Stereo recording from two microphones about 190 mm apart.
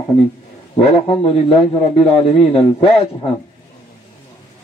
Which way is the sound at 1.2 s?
30° left (ahead or behind).